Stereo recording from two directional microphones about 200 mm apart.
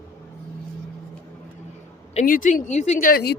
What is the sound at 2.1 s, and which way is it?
Speech, 40° left (ahead or behind).